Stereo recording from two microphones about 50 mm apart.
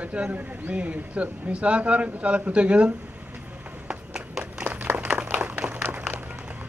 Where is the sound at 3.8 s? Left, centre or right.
Centre.